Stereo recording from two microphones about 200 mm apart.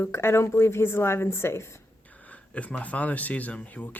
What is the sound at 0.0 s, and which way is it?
Speech, 10° left (ahead or behind).